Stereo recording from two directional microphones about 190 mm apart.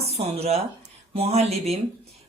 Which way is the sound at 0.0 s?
35° right (ahead or behind).